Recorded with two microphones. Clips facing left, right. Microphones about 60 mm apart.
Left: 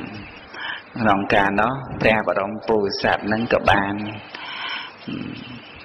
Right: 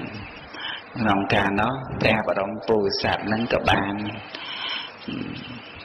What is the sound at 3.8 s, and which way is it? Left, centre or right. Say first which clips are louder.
Speech: left 2 dB; left.